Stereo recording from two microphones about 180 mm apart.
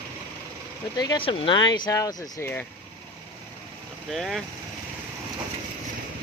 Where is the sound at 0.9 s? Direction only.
25° left (ahead or behind).